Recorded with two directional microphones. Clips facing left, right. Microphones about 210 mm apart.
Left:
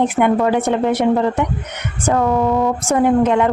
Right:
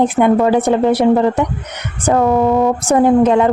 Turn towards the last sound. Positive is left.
turn(degrees=-30)  # may be behind; listen again after turning